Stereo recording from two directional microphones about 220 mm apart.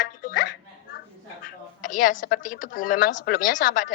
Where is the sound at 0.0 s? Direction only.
40° left (ahead or behind).